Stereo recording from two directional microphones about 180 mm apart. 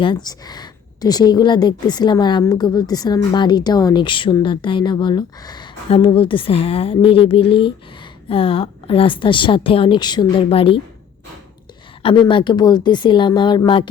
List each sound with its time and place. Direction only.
0.0 s speech: 25° left (ahead or behind)
12.0 s speech: 25° left (ahead or behind)